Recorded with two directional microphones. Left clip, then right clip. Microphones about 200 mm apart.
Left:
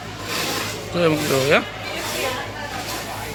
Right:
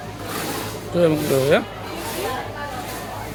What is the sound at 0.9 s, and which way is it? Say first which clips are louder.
Speech: right 1 dB; 10° right (ahead or behind).